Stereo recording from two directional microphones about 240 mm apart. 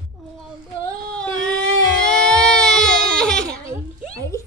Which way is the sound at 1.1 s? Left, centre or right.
Centre.